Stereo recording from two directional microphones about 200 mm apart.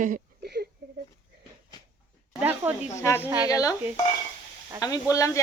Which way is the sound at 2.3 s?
10° right (ahead or behind).